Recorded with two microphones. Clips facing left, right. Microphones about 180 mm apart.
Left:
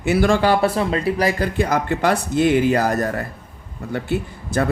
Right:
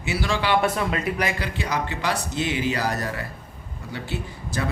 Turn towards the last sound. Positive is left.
turn(degrees=55)  # may be behind; listen again after turning